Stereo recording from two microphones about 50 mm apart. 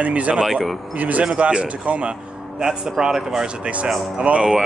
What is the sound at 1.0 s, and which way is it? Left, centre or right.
Speech, right.